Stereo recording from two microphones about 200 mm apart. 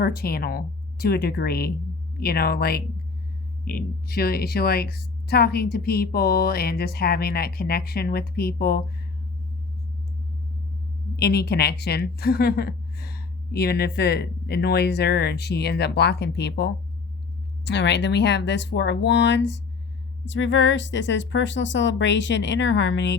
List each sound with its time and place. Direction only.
0.0 s a woman's voice: 50° left (ahead or behind)
11.2 s a woman's voice: 55° left (ahead or behind)